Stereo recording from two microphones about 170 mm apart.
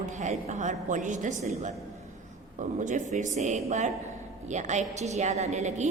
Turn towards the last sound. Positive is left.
turn(degrees=-40)  # may be behind; listen again after turning